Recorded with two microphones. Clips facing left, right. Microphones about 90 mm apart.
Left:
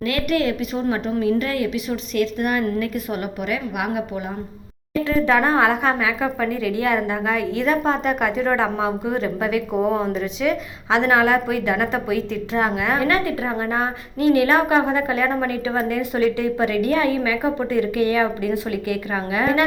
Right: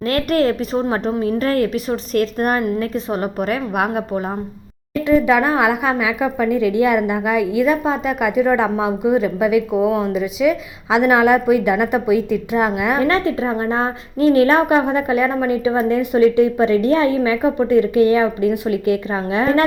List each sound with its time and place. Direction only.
0.0 s a woman's voice: 40° right (ahead or behind)
5.0 s a woman's voice: 15° right (ahead or behind)
13.0 s a woman's voice: 25° right (ahead or behind)